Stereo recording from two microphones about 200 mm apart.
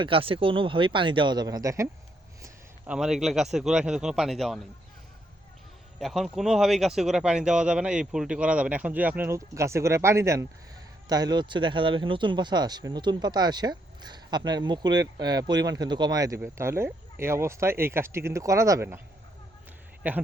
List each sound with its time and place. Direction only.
0.0 s a man's voice: 25° right (ahead or behind); by 4.6 s centre (ahead or behind)
6.0 s speech: centre (ahead or behind)
20.0 s speech: 10° right (ahead or behind)